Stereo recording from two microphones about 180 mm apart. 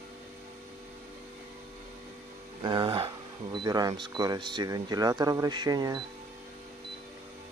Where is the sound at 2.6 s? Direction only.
25° right (ahead or behind).